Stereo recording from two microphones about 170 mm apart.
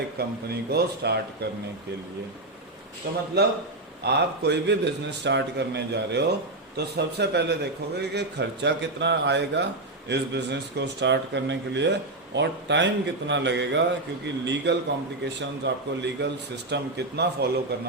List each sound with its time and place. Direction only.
0.2 s a man's voice: 70° right (ahead or behind)
3.0 s a man's voice: 70° right (ahead or behind)
4.0 s a man's voice: 90° right; by 17.7 s 75° right (ahead or behind)